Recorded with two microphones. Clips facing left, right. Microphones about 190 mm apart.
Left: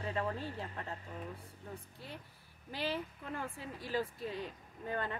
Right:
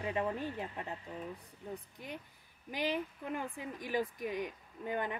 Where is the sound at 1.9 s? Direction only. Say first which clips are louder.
Right 3 dB; 15° right (ahead or behind).